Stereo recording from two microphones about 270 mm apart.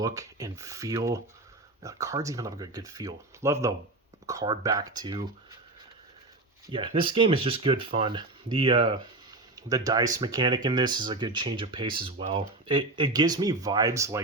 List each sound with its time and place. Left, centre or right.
0.0 s speech: centre
6.7 s speech: centre